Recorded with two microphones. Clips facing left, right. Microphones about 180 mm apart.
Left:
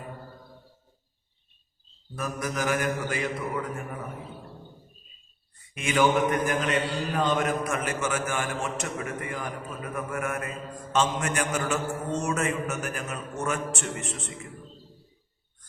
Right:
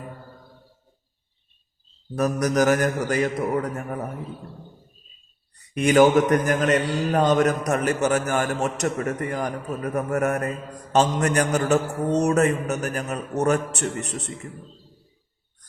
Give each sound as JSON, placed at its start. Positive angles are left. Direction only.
{"t": 2.1, "sound": "a man's voice", "side_deg": -40}
{"t": 5.7, "sound": "a man's voice", "side_deg": -40}